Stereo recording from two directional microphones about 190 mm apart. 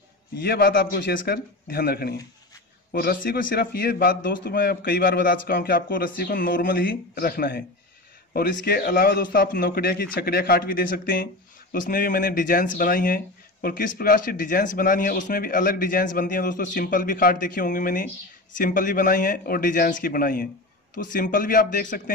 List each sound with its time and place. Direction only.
0.4 s speech: 55° left (ahead or behind)